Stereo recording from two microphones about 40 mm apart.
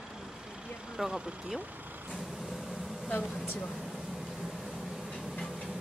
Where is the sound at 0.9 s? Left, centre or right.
Centre.